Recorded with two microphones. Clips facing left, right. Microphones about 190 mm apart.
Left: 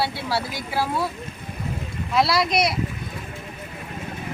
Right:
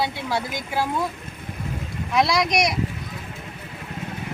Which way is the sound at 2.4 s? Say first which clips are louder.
Even; 15° right (ahead or behind).